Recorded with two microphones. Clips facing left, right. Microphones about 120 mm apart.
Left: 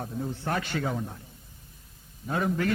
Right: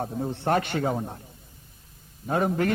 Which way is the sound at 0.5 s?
60° right (ahead or behind).